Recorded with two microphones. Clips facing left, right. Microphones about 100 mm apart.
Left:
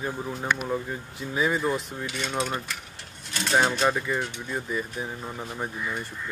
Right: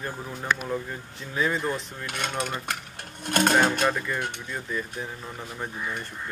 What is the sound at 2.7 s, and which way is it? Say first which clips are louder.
Speech: right 5 dB; 55° right (ahead or behind).